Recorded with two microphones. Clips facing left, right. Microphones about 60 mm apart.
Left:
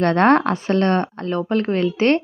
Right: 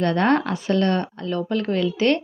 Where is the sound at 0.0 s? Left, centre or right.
Left.